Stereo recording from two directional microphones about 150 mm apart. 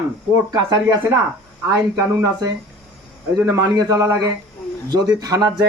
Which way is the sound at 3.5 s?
25° right (ahead or behind).